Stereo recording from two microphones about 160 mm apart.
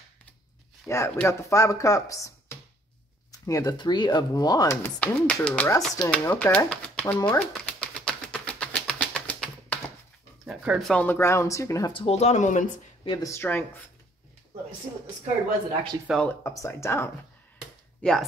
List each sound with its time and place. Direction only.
0.8 s speech: 15° left (ahead or behind)
4.8 s speech: 10° left (ahead or behind)
7.2 s a sound: 5° left (ahead or behind)
10.4 s speech: 5° right (ahead or behind)
10.9 s speech: 10° left (ahead or behind)
11.9 s speech: 35° left (ahead or behind)
13.0 s speech: 30° left (ahead or behind)
13.3 s speech: 15° left (ahead or behind)
16.4 s speech: 20° left (ahead or behind)